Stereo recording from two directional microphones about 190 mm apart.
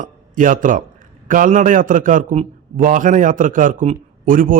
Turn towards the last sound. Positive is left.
turn(degrees=-45)  # may be behind; listen again after turning